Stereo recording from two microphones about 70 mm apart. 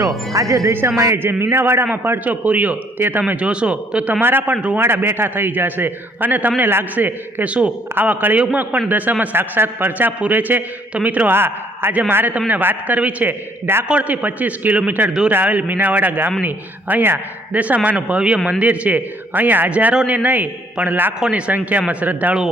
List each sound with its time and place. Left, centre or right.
0.0 s speech: right
0.7 s a man's voice: right
0.9 s speech: right
1.2 s a man's voice: right
1.9 s speech: right
4.2 s a man's voice: right
4.5 s speech: centre
4.8 s speech: right
11.3 s a man's voice: right